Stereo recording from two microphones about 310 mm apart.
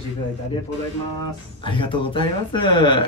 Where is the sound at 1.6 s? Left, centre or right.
Centre.